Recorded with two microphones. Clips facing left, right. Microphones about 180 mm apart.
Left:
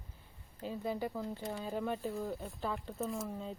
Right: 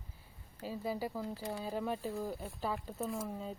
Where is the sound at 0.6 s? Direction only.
5° right (ahead or behind).